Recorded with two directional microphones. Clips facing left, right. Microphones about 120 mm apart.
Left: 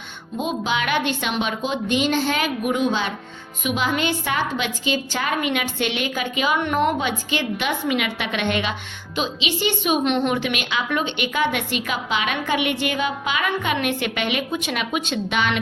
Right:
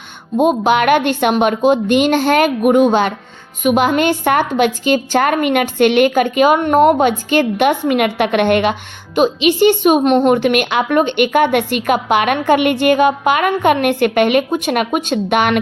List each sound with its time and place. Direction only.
0.3 s a woman's voice: 55° right (ahead or behind)